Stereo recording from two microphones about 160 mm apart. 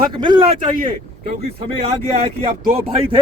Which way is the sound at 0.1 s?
30° right (ahead or behind).